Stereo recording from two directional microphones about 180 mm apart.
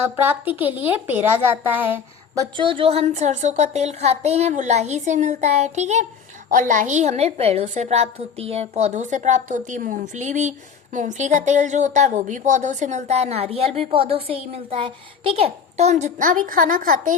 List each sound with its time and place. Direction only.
0.0 s speech: 10° right (ahead or behind)
2.3 s speech: 25° right (ahead or behind); by 17.2 s 45° right (ahead or behind)